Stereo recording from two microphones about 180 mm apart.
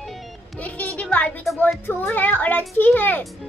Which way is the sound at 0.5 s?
10° left (ahead or behind).